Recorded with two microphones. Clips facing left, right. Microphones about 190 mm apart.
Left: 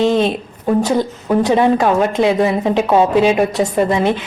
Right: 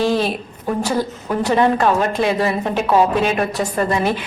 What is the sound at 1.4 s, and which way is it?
A woman's voice, 15° left (ahead or behind).